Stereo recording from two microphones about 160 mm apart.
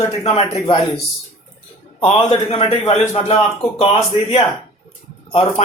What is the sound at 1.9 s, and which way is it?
Speech, 35° left (ahead or behind).